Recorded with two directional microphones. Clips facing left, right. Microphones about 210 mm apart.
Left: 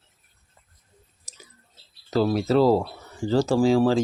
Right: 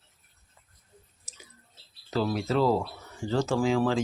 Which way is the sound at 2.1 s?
40° left (ahead or behind).